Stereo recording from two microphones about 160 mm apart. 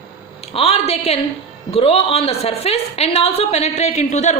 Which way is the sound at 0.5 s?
40° left (ahead or behind).